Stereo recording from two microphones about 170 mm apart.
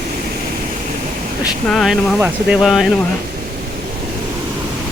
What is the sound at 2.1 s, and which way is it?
Speech, 10° right (ahead or behind).